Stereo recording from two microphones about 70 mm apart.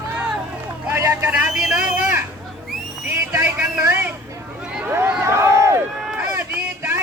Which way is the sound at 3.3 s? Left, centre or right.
Right.